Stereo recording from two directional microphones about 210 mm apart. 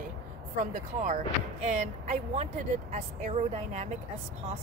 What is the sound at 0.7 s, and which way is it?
Speech, 35° right (ahead or behind).